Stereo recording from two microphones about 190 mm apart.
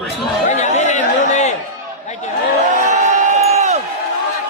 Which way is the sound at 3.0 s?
40° right (ahead or behind).